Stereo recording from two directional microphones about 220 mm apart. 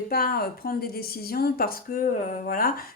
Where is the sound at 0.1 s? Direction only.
40° left (ahead or behind).